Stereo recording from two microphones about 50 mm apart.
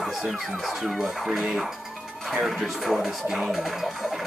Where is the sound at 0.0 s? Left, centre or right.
Centre.